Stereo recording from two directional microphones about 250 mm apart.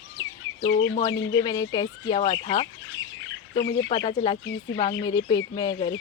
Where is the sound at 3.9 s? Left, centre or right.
Centre.